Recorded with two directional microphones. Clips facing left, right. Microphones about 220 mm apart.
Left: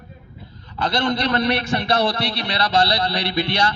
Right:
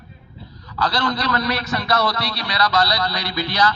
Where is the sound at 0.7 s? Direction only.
25° left (ahead or behind).